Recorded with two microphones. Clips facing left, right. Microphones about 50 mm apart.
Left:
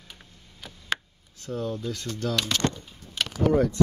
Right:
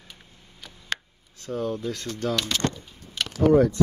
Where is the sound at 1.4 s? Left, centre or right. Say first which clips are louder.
Right 2 dB; right.